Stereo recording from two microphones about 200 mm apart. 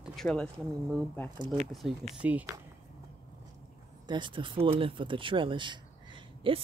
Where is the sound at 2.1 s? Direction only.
5° right (ahead or behind).